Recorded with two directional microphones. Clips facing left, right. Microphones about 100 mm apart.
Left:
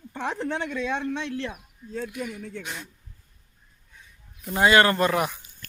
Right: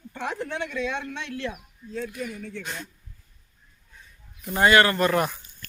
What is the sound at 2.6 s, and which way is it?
Speech, 10° left (ahead or behind).